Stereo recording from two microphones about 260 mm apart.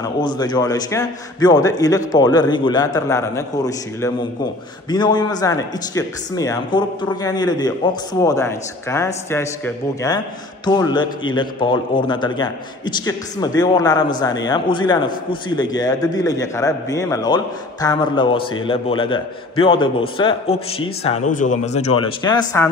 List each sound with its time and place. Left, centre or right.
0.0 s a man's voice: centre